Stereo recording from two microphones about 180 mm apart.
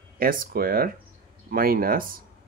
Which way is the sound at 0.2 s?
50° right (ahead or behind).